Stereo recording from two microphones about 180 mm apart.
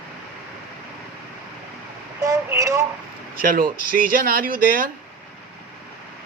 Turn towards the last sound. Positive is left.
turn(degrees=-50)  # may be behind; listen again after turning